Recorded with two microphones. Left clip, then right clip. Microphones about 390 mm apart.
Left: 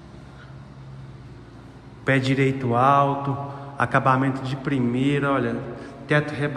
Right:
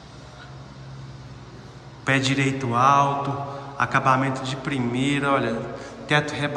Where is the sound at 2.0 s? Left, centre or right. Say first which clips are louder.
Left 1 dB; centre.